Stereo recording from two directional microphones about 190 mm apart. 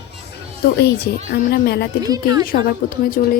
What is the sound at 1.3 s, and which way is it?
Speech, 55° left (ahead or behind).